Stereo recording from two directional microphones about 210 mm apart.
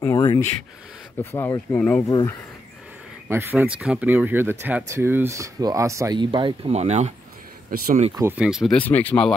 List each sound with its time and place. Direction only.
0.0 s a sound: 15° left (ahead or behind)
1.2 s speech: 10° left (ahead or behind)
3.3 s speech: 10° right (ahead or behind); by 7.2 s 30° right (ahead or behind)
7.7 s speech: 45° right (ahead or behind)
8.2 s speech: 10° right (ahead or behind)